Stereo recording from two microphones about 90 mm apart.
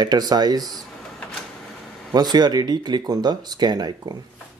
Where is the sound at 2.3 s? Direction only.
50° right (ahead or behind).